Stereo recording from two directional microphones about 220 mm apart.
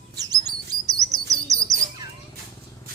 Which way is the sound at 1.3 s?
15° right (ahead or behind).